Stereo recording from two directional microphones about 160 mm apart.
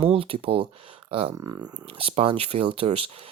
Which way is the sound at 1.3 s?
25° right (ahead or behind).